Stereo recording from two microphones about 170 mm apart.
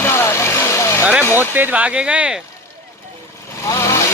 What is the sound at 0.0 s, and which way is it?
Vehicle, 15° left (ahead or behind).